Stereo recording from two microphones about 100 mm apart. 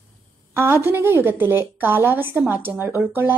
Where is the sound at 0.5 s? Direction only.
25° right (ahead or behind).